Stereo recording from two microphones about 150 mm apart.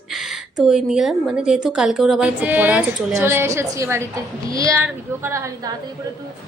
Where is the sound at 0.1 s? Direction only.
Centre (ahead or behind).